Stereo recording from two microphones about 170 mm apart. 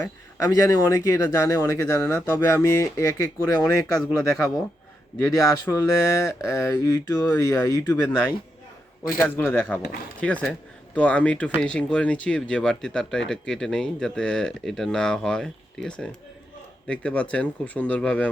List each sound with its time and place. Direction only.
0.0 s speech: 20° left (ahead or behind)
5.5 s speech: 20° left (ahead or behind)